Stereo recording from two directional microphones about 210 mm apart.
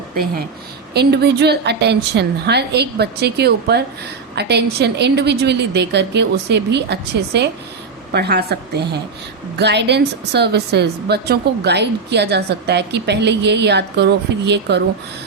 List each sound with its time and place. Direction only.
0.9 s a woman's voice: 50° right (ahead or behind)